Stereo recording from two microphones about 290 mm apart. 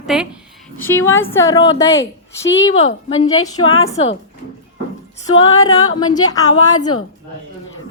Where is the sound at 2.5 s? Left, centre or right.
Left.